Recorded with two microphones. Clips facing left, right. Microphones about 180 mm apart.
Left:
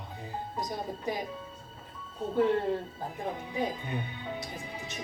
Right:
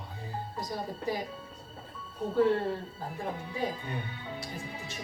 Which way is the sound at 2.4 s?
20° left (ahead or behind).